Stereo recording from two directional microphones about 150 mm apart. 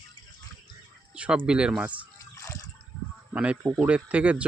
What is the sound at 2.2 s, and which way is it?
Water, 20° left (ahead or behind).